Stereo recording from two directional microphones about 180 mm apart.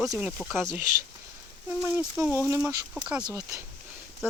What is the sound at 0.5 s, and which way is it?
Speech, 15° right (ahead or behind).